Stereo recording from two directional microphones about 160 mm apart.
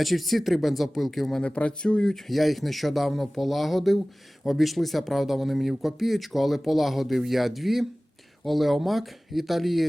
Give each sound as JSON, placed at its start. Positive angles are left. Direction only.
{"t": 0.0, "sound": "speech", "side_deg": 0}